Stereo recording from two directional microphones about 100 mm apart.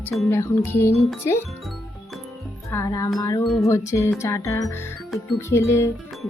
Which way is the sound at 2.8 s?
35° left (ahead or behind).